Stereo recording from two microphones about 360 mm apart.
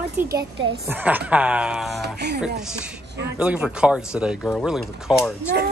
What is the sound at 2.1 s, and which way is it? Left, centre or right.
Speech, right.